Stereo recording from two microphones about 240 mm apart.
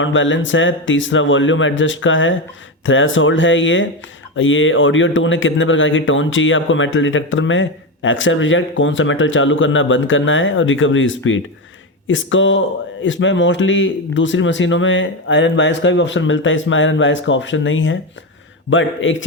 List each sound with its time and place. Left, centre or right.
0.0 s a man's voice: left